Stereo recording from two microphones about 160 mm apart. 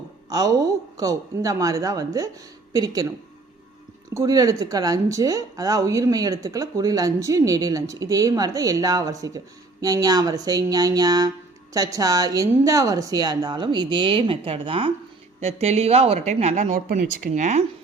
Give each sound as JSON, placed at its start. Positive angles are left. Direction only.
{"t": 0.3, "sound": "speech", "side_deg": -20}
{"t": 4.1, "sound": "a woman's voice", "side_deg": -20}
{"t": 16.7, "sound": "speech", "side_deg": -60}